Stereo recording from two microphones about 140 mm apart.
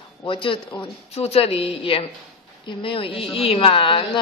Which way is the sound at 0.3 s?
35° left (ahead or behind).